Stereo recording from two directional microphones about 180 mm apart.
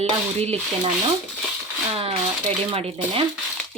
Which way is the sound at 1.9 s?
30° right (ahead or behind).